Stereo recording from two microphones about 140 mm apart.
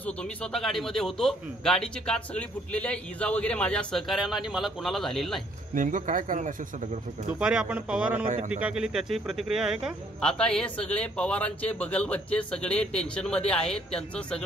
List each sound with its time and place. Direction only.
0.0 s a man's voice: 5° left (ahead or behind)
5.8 s speech: 70° right (ahead or behind)
7.3 s a man's voice: 5° right (ahead or behind)
10.3 s speech: 5° left (ahead or behind)